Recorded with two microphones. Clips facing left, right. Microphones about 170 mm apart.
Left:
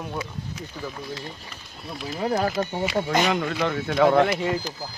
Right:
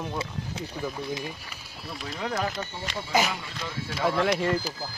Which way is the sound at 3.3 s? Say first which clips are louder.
Left 12 dB; 65° left (ahead or behind).